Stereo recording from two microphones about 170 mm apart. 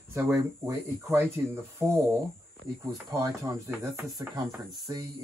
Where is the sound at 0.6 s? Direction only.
15° right (ahead or behind).